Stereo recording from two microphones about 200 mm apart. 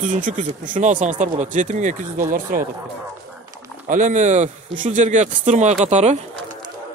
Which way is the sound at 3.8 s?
40° right (ahead or behind).